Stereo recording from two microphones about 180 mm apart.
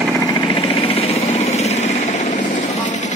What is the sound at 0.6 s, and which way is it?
Jackhammer, 35° left (ahead or behind).